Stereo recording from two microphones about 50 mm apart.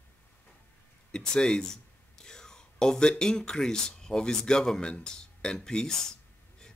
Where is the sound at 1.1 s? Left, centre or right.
Centre.